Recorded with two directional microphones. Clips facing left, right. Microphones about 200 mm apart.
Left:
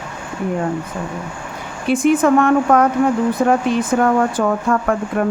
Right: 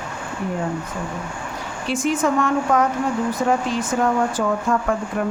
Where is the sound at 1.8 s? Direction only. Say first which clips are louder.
Left 7 dB; 55° left (ahead or behind).